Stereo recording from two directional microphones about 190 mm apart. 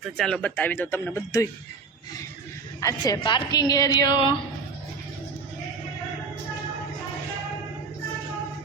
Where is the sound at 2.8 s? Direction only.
20° left (ahead or behind).